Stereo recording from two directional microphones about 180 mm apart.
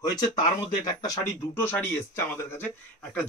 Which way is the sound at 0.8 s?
20° left (ahead or behind).